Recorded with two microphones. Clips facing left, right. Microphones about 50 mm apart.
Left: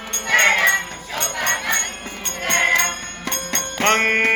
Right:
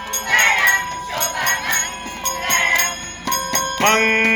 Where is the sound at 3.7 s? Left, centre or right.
Centre.